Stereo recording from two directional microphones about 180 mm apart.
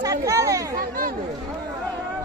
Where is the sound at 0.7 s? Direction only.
50° right (ahead or behind).